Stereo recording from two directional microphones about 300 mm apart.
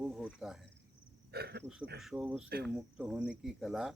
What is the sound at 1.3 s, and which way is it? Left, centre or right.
Speech, right.